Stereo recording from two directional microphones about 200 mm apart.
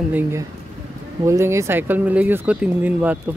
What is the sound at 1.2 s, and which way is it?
Speech, 15° right (ahead or behind).